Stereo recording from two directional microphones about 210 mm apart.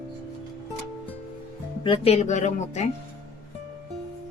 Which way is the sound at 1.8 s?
25° left (ahead or behind).